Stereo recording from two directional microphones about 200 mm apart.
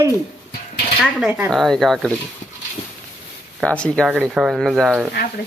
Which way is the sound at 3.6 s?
5° left (ahead or behind).